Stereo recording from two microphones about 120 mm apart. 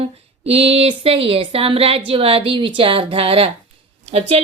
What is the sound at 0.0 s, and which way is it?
A woman's voice, 55° right (ahead or behind).